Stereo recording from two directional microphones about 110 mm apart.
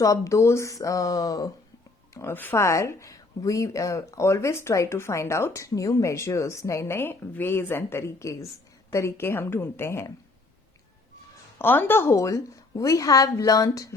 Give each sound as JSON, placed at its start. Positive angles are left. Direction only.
{"t": 0.0, "sound": "speech", "side_deg": 30}
{"t": 2.1, "sound": "speech", "side_deg": 20}
{"t": 11.6, "sound": "speech", "side_deg": 20}